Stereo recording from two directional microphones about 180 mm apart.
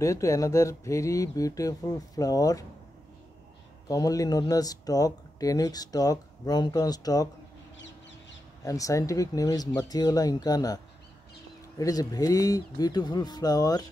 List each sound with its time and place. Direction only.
0.0 s speech: 20° left (ahead or behind)
3.9 s speech: 20° left (ahead or behind)
8.6 s speech: 20° left (ahead or behind)
11.8 s speech: 20° left (ahead or behind)